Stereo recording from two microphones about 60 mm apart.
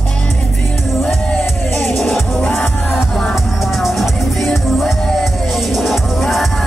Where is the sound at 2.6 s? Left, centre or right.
Left.